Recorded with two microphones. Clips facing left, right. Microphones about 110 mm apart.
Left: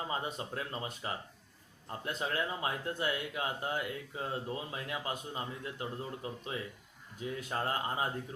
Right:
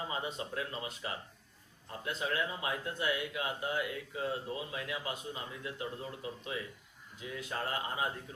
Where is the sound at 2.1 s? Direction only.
45° left (ahead or behind).